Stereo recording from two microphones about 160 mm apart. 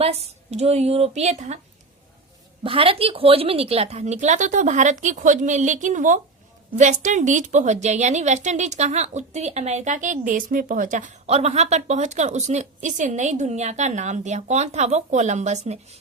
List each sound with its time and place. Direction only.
0.0 s a woman's voice: 40° right (ahead or behind)
2.6 s a woman's voice: 35° right (ahead or behind)